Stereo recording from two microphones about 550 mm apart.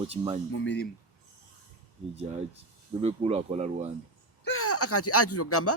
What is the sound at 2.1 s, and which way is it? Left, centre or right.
Speech, centre.